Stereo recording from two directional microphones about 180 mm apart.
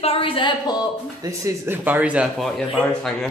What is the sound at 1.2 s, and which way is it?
Speech, 15° right (ahead or behind).